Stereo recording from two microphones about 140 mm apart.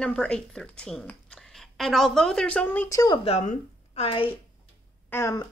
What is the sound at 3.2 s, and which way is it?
Speech, 50° left (ahead or behind).